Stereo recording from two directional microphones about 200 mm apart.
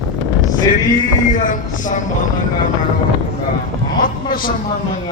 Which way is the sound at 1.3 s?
40° left (ahead or behind).